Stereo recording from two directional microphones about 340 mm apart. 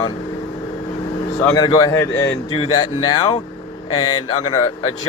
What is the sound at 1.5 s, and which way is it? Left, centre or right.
Speech, centre.